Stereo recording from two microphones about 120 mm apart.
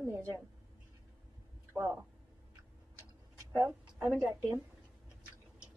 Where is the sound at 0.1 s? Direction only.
25° right (ahead or behind).